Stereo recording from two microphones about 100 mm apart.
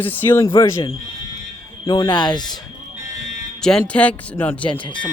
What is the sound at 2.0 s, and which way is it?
Speech, 45° left (ahead or behind).